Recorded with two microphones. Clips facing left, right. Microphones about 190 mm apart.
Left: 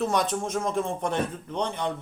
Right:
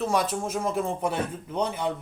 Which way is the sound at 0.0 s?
5° right (ahead or behind).